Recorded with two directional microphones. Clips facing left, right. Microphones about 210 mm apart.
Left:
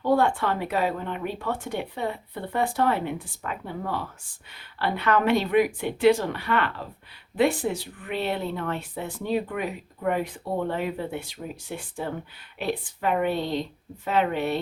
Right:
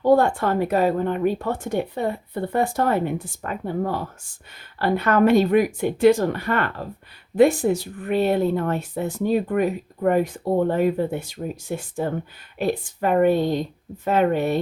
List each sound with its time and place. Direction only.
0.0 s speech: 45° right (ahead or behind)